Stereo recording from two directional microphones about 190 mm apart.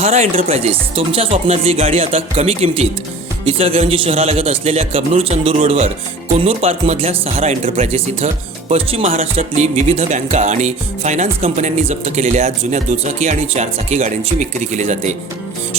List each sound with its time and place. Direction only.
0.0 s speech: 35° right (ahead or behind)